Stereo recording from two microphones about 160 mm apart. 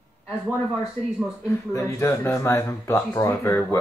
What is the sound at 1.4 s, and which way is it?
Speech, 15° left (ahead or behind).